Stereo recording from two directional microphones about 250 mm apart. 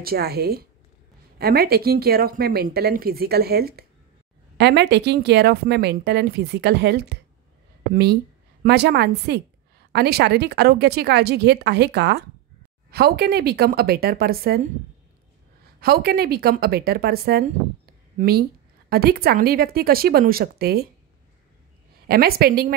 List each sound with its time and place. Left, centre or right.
0.0 s a woman's voice: right
15.8 s a woman's voice: right
22.0 s a woman's voice: right